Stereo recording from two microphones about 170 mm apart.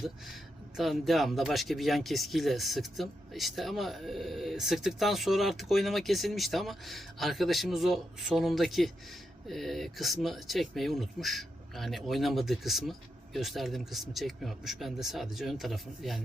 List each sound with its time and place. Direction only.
0.8 s speech: centre (ahead or behind)